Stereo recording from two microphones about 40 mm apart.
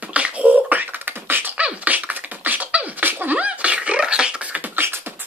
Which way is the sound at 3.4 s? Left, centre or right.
Right.